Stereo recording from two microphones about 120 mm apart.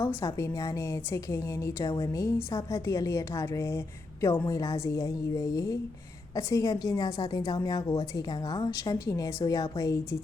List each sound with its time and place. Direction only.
0.0 s a woman's voice: 20° left (ahead or behind)